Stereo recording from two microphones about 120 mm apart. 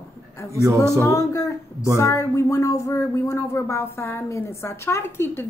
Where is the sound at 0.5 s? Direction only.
25° right (ahead or behind).